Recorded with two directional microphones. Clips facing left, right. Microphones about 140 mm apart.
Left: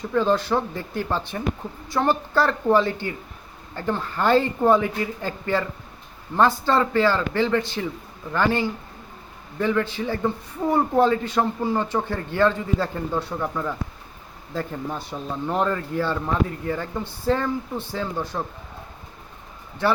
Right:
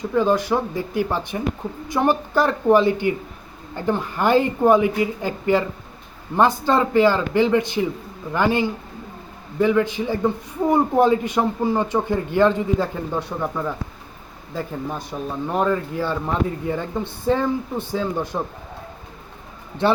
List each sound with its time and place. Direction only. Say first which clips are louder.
0.1 s a man's voice: right 2 dB; 15° right (ahead or behind)
19.8 s speech: right 3 dB; 25° right (ahead or behind)